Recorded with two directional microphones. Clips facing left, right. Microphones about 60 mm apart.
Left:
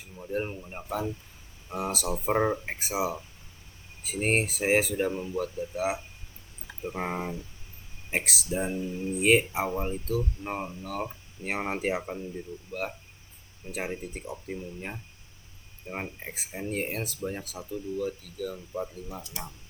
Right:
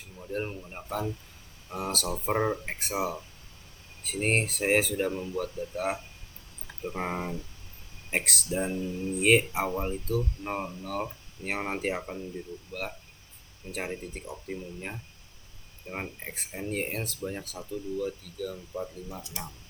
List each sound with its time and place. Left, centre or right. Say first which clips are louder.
0.2 s speech: left 2 dB; centre
9.1 s speech: even; centre
13.7 s speech: left 1 dB; centre
15.9 s speech: left 1 dB; centre
16.2 s speech: left 1 dB; centre